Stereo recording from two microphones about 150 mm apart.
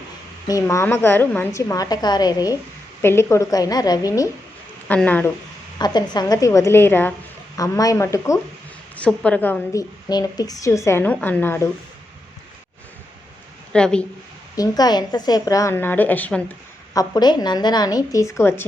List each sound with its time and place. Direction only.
0.4 s a woman's voice: 20° left (ahead or behind)
4.9 s a woman's voice: 10° left (ahead or behind)
5.8 s a woman's voice: 30° left (ahead or behind)
7.5 s a woman's voice: 25° left (ahead or behind)
9.0 s a woman's voice: 10° left (ahead or behind)
10.1 s a woman's voice: 25° left (ahead or behind)
13.7 s a woman's voice: 5° left (ahead or behind)
14.5 s a woman's voice: 25° left (ahead or behind)
16.9 s a woman's voice: 25° left (ahead or behind)